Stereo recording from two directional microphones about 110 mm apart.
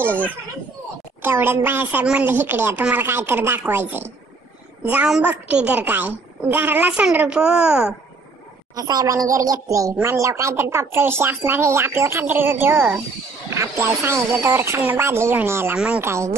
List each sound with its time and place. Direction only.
1.2 s a child's voice: 20° right (ahead or behind)
8.7 s a woman's voice: 35° right (ahead or behind)